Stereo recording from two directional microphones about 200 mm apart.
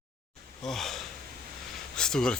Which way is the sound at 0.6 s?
Centre (ahead or behind).